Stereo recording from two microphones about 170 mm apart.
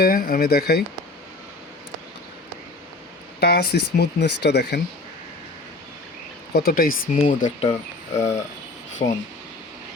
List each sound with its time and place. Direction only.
0.0 s speech: 60° left (ahead or behind)
3.4 s speech: 65° left (ahead or behind)
6.5 s speech: 65° left (ahead or behind)
7.3 s speech: 45° left (ahead or behind)
8.2 s speech: 15° left (ahead or behind)
9.0 s speech: 65° left (ahead or behind)